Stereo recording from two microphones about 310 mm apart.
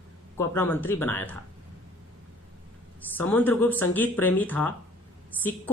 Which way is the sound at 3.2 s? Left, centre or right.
Centre.